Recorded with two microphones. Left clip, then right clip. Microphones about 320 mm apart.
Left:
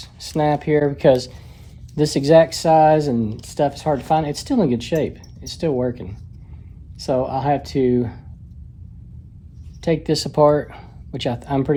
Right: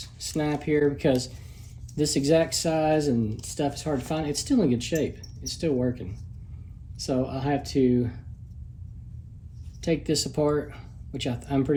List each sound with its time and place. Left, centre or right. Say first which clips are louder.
0.0 s speech: left 9 dB; centre
9.8 s speech: left 6 dB; centre